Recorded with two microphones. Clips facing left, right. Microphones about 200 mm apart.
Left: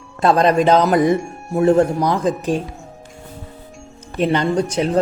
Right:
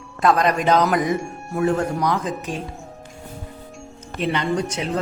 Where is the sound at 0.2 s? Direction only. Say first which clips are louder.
Left 4 dB; 30° left (ahead or behind).